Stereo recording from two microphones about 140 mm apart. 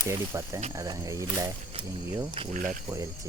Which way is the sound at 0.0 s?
20° right (ahead or behind).